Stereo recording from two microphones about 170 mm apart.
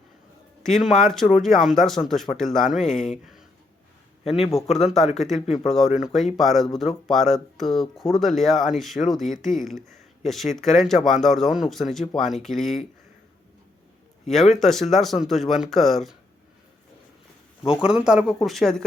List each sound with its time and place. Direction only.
0.6 s speech: centre (ahead or behind)
4.2 s a man's voice: 40° left (ahead or behind)
5.1 s speech: centre (ahead or behind)
14.3 s speech: centre (ahead or behind)
17.8 s speech: 5° right (ahead or behind)